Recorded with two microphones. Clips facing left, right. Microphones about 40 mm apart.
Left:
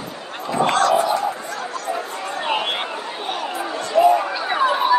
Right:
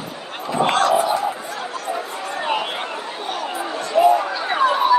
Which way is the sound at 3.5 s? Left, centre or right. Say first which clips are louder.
Even; centre.